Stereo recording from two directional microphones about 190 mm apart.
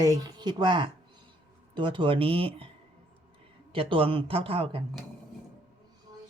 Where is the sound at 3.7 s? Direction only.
30° right (ahead or behind).